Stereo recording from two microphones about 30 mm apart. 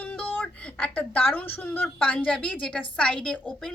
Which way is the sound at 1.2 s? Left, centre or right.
Left.